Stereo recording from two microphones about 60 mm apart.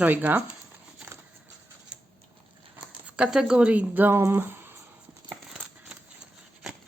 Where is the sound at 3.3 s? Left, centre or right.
Centre; by 4.1 s right.